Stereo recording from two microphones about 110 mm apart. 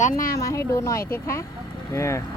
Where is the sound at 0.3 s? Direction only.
30° left (ahead or behind).